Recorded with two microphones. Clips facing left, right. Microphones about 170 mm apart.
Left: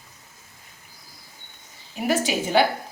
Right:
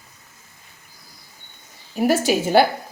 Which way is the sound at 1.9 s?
40° right (ahead or behind).